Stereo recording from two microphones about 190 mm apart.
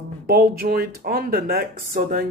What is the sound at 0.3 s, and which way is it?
Speech, 50° right (ahead or behind).